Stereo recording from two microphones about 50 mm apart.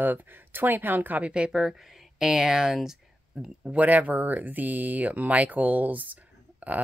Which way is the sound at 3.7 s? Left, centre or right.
Right.